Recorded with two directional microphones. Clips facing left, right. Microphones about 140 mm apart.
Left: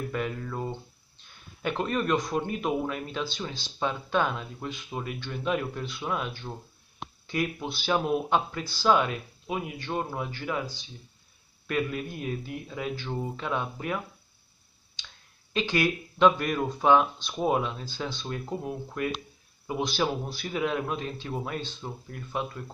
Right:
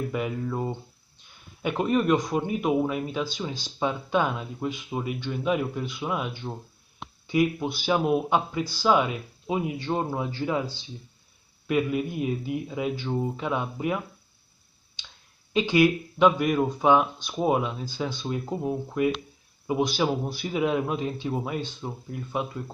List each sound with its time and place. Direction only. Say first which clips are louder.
0.1 s speech: right 3 dB; 15° right (ahead or behind)
11.6 s speech: right 5 dB; 15° right (ahead or behind)
15.5 s speech: right 6 dB; 15° right (ahead or behind)